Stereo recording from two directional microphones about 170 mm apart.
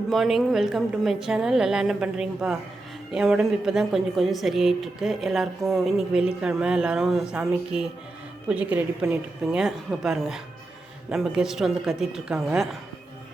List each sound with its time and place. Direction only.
0.1 s a woman's voice: centre (ahead or behind)